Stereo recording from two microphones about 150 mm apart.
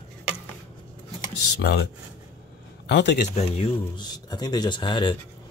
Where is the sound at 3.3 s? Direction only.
40° left (ahead or behind).